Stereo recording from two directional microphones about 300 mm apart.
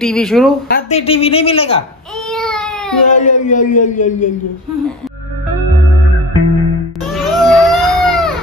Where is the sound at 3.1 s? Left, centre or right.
Left.